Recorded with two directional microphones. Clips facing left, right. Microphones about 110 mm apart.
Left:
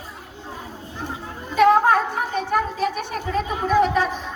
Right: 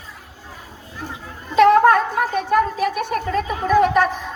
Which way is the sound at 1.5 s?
65° right (ahead or behind).